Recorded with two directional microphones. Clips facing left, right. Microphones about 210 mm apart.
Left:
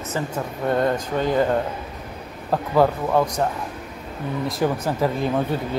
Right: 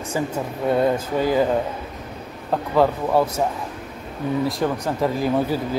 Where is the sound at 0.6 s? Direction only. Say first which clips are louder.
Right 2 dB; 5° right (ahead or behind).